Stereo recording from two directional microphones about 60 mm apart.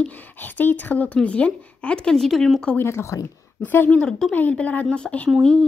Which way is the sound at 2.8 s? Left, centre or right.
Left.